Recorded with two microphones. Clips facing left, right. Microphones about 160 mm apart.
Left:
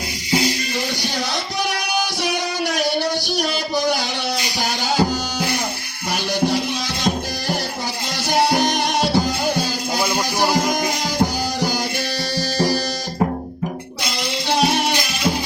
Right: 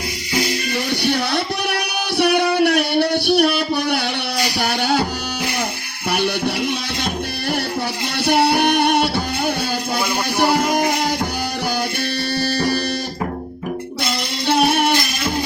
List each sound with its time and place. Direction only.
1.0 s music: 60° right (ahead or behind)
6.1 s music: 60° right (ahead or behind)
8.2 s music: 60° right (ahead or behind)
12.4 s music: 60° right (ahead or behind)
14.4 s music: 55° right (ahead or behind)